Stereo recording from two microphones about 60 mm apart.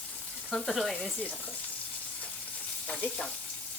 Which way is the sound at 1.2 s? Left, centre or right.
Left.